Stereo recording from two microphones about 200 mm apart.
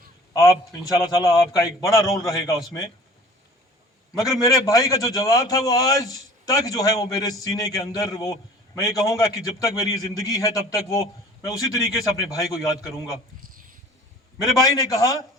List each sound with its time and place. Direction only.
0.3 s a man's voice: 15° left (ahead or behind)
4.2 s a man's voice: 15° left (ahead or behind)
14.5 s a man's voice: 15° left (ahead or behind)